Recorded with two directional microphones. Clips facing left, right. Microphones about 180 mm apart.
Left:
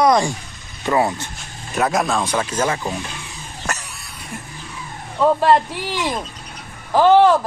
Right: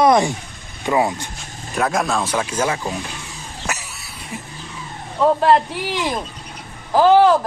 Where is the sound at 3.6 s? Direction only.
5° right (ahead or behind).